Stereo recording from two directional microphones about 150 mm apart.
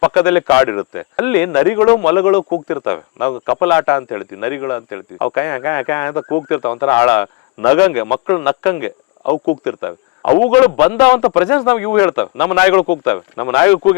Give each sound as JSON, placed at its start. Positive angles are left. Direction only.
{"t": 0.0, "sound": "speech", "side_deg": 10}